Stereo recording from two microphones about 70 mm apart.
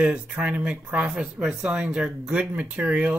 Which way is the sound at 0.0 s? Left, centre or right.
Centre.